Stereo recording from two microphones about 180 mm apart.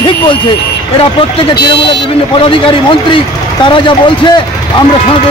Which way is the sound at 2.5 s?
30° left (ahead or behind).